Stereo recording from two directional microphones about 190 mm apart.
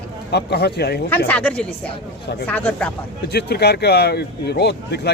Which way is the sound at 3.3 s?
60° left (ahead or behind).